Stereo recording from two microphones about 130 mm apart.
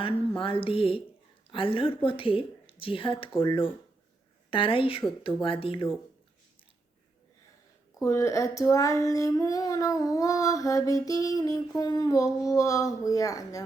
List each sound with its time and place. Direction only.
0.3 s speech: 45° left (ahead or behind)
8.0 s female singing: 25° left (ahead or behind)